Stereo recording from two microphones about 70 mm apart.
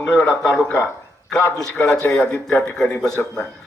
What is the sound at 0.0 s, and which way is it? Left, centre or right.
Speech, centre.